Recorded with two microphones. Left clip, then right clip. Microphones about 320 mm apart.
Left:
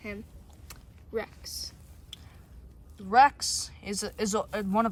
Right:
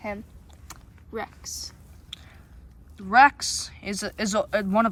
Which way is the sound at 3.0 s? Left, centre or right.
Centre.